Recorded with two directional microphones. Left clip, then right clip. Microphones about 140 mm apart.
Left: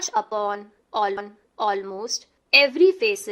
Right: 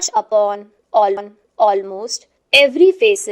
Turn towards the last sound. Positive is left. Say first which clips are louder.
# right 7 dB
turn(degrees=-15)  # may be behind; listen again after turning